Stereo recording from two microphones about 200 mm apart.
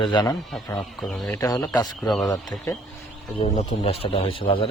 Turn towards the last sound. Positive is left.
turn(degrees=25)  # may be behind; listen again after turning